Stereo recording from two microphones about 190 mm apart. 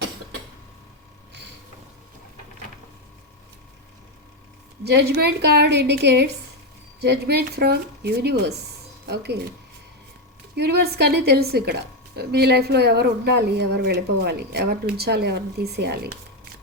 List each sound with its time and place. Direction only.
5.1 s a woman's voice: 60° right (ahead or behind)
10.5 s a woman's voice: 55° right (ahead or behind)